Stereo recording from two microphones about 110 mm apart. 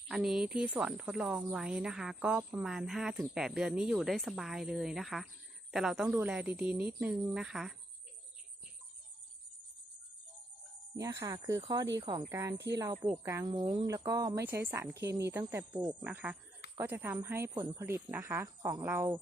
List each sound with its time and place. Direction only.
0.1 s a woman's voice: 5° right (ahead or behind)
10.9 s speech: 30° right (ahead or behind)
13.5 s speech: 45° right (ahead or behind)
13.8 s speech: 30° right (ahead or behind)
14.4 s speech: 20° right (ahead or behind)